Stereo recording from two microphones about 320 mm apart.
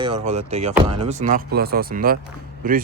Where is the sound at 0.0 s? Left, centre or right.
Centre.